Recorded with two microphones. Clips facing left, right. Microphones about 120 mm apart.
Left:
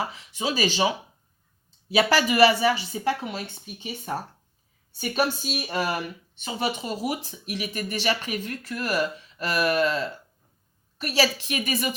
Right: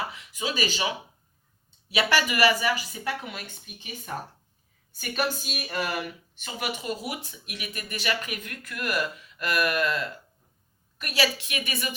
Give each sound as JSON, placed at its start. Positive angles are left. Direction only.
{"t": 0.1, "sound": "speech", "side_deg": 35}